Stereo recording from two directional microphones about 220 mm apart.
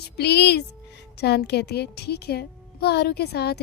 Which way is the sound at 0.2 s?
50° left (ahead or behind).